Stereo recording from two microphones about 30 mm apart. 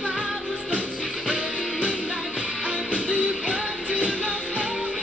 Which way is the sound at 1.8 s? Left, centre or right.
Right.